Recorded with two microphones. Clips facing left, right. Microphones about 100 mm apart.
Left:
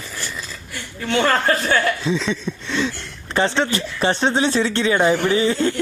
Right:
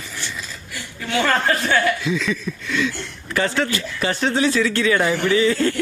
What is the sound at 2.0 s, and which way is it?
Speech, 30° left (ahead or behind).